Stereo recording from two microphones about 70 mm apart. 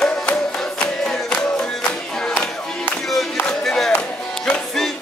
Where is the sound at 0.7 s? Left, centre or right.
Centre.